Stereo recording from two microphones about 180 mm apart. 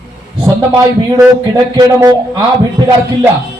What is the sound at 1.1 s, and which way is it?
A man's voice, 20° right (ahead or behind).